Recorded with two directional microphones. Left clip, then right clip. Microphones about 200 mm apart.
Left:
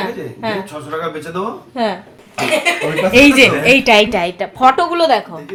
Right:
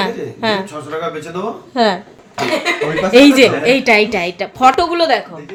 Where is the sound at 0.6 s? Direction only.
25° right (ahead or behind).